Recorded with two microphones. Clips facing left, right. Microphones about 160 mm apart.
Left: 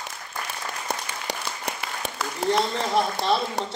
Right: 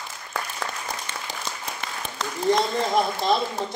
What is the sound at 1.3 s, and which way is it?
Applause, 75° left (ahead or behind).